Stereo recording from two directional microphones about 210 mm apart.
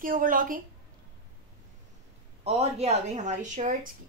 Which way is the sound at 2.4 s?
30° right (ahead or behind).